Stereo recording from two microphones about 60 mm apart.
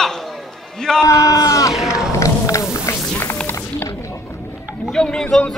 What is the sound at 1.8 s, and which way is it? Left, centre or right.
Music, centre.